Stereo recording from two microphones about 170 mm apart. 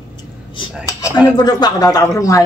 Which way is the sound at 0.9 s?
20° left (ahead or behind).